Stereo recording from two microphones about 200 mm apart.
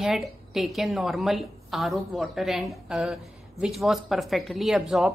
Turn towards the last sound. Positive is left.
turn(degrees=0)  # may be behind; listen again after turning